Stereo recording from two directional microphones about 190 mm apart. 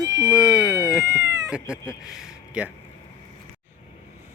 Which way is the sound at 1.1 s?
15° right (ahead or behind).